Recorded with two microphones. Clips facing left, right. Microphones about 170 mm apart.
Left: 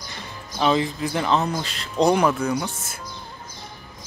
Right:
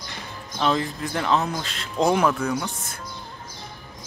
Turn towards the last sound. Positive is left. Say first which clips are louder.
# left 1 dB
turn(degrees=5)  # may be behind; listen again after turning